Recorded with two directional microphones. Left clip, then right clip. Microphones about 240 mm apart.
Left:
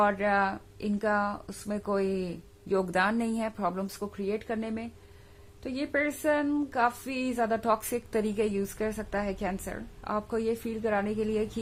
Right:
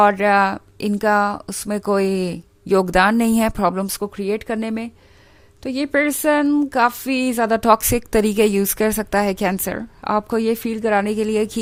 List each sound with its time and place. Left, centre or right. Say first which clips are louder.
0.0 s speech: right 11 dB; right